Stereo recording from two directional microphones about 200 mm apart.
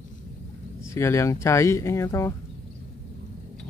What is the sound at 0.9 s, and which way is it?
Speech, 15° left (ahead or behind).